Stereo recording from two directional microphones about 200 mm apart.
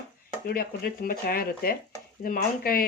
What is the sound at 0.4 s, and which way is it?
Speech, 50° left (ahead or behind).